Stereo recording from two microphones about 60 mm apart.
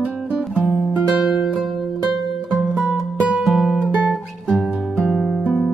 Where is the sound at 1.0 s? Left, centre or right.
Centre.